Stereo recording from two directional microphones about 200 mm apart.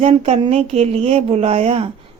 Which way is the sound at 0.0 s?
30° right (ahead or behind).